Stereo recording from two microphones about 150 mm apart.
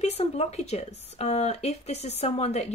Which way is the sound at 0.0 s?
45° left (ahead or behind).